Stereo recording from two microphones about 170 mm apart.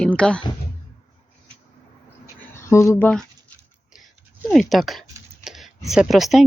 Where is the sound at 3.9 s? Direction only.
Centre (ahead or behind).